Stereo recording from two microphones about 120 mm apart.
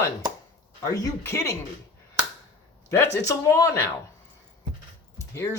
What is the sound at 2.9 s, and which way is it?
Speech, 25° left (ahead or behind).